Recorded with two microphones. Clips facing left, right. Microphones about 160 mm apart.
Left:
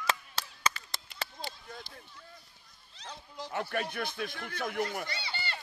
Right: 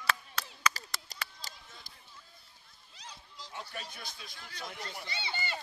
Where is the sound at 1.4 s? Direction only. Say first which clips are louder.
Left 9 dB; 40° right (ahead or behind).